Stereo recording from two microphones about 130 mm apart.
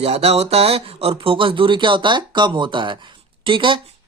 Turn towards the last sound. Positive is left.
turn(degrees=-40)  # may be behind; listen again after turning